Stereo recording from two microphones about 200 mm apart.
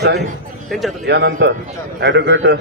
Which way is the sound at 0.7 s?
Centre (ahead or behind).